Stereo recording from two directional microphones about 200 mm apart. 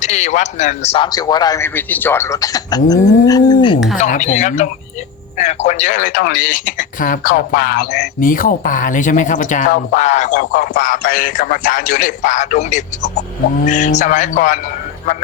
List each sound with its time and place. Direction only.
0.0 s a man's voice: 35° left (ahead or behind)
4.0 s speech: 40° left (ahead or behind)